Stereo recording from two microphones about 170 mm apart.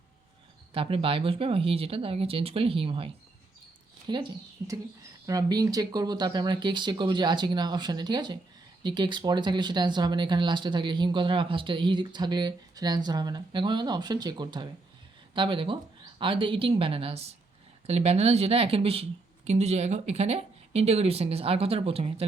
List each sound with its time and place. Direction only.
0.7 s speech: 35° right (ahead or behind)